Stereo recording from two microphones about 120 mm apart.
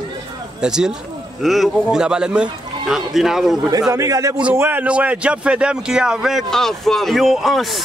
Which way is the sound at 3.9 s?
30° right (ahead or behind).